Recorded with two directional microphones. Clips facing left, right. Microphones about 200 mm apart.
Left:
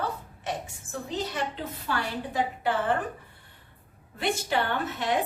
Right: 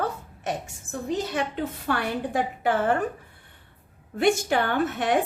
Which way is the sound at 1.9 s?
55° right (ahead or behind).